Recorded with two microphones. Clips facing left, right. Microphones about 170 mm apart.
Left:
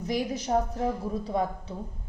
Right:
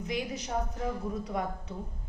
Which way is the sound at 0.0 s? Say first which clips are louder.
Left 5 dB; 35° left (ahead or behind).